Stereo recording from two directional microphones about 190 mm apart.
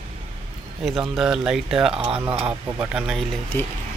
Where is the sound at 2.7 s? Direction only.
5° right (ahead or behind).